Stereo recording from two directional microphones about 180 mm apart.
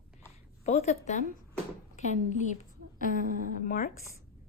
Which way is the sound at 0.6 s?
35° left (ahead or behind).